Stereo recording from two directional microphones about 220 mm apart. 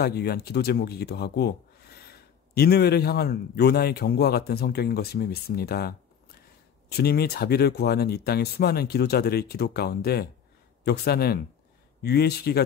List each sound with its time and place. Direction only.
0.0 s speech: 45° left (ahead or behind)